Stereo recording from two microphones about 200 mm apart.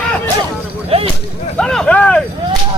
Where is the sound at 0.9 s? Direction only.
30° right (ahead or behind).